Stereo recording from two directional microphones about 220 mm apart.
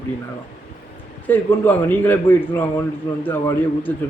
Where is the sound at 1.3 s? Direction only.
10° left (ahead or behind).